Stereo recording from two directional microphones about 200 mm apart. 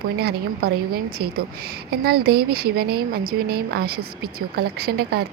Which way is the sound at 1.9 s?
50° right (ahead or behind).